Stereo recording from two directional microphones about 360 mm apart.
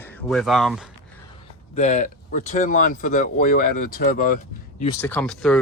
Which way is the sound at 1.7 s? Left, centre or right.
Centre.